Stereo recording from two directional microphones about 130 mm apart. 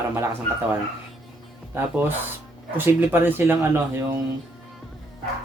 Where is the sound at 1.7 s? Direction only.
15° right (ahead or behind).